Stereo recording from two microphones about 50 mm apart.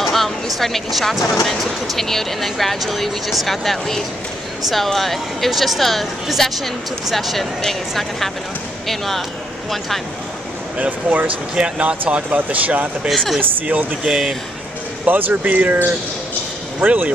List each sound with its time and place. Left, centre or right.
0.0 s speech: centre
8.8 s speech: centre
10.8 s speech: right
11.5 s speech: right
12.4 s speech: right
14.0 s speech: centre
15.0 s speech: right